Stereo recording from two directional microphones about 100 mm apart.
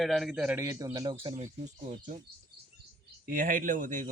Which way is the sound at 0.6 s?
35° right (ahead or behind).